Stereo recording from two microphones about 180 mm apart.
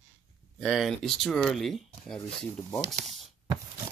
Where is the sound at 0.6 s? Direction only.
Centre (ahead or behind).